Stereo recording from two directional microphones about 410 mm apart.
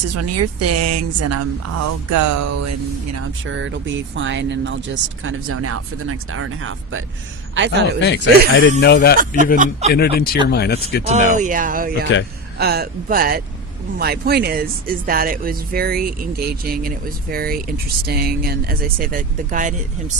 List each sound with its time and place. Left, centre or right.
0.1 s speech: right
8.0 s speech: left
9.1 s speech: centre
9.9 s speech: left
11.0 s speech: centre